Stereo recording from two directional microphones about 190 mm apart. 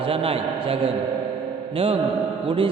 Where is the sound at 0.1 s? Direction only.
30° right (ahead or behind).